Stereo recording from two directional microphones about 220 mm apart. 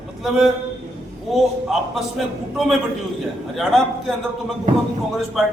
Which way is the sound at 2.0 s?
Centre (ahead or behind).